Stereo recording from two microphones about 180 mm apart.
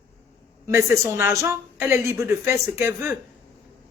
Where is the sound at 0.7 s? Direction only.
15° right (ahead or behind).